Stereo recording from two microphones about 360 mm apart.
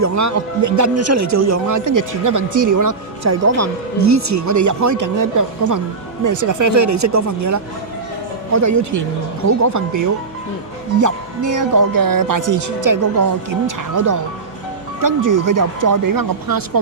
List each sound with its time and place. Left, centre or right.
0.0 s speech: right